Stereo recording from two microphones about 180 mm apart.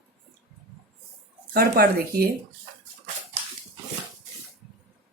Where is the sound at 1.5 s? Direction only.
60° right (ahead or behind).